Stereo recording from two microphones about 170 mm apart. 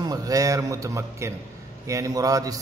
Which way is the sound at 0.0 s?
20° right (ahead or behind).